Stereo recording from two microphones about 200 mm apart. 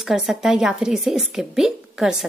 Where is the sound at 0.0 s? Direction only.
Centre (ahead or behind).